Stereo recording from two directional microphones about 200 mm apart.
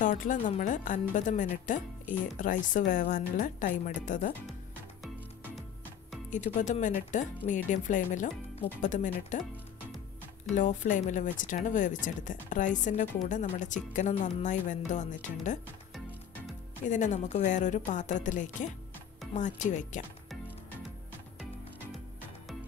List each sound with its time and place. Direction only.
0.0 s speech: 40° left (ahead or behind)
6.3 s speech: 40° left (ahead or behind)
10.5 s speech: 40° left (ahead or behind)
16.8 s speech: 35° left (ahead or behind)